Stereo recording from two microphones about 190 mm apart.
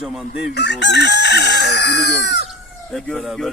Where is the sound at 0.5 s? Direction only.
65° left (ahead or behind).